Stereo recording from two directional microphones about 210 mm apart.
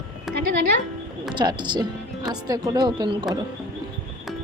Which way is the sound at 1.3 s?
20° right (ahead or behind).